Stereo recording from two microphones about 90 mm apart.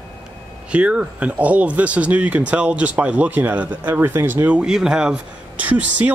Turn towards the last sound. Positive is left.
turn(degrees=-15)  # may be behind; listen again after turning